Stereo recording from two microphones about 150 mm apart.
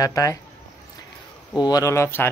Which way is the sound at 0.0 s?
20° left (ahead or behind).